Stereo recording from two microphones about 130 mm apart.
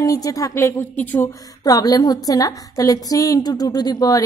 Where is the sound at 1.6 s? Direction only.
30° left (ahead or behind).